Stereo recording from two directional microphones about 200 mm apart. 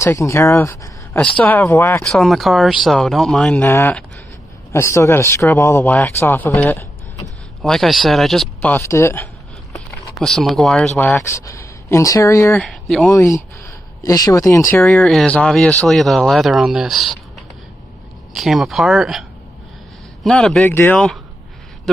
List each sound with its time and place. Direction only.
0.0 s speech: 15° left (ahead or behind)
10.1 s speech: centre (ahead or behind)
12.6 s speech: centre (ahead or behind)
13.1 s speech: 15° left (ahead or behind)
14.8 s speech: 5° left (ahead or behind)
18.3 s speech: centre (ahead or behind)
20.2 s a man's voice: 5° left (ahead or behind)